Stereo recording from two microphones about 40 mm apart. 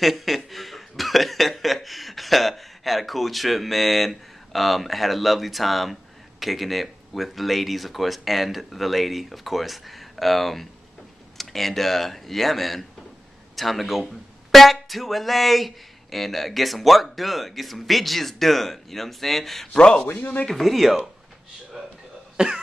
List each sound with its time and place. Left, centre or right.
0.0 s speech: centre
19.7 s speech: left
20.2 s speech: left
20.4 s speech: centre
21.8 s a sound: centre
22.4 s cough: centre